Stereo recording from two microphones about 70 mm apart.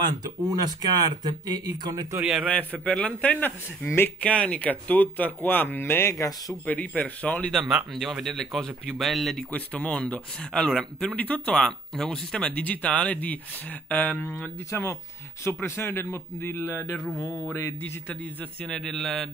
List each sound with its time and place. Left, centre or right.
0.2 s speech: right
2.4 s speech: centre
3.8 s speech: left
4.2 s speech: centre; by 6.2 s left
6.6 s speech: centre
7.5 s speech: centre
9.5 s speech: centre
11.5 s speech: centre
14.7 s speech: left
18.6 s speech: centre